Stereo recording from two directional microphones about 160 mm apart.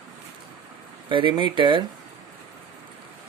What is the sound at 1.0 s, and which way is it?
Speech, 30° right (ahead or behind).